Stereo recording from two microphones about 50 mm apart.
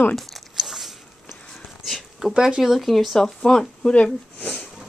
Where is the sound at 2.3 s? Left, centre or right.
Centre.